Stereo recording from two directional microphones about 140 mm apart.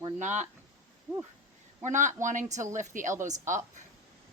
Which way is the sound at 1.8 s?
60° right (ahead or behind).